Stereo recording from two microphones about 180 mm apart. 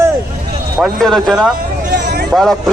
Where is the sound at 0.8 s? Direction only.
Centre (ahead or behind).